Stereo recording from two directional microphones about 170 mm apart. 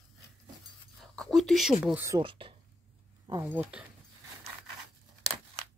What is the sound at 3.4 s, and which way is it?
Speech, 10° right (ahead or behind).